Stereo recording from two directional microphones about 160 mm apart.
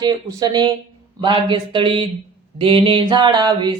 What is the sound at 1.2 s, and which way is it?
Speech, 30° right (ahead or behind).